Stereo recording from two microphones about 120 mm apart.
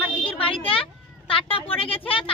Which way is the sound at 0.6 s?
50° left (ahead or behind).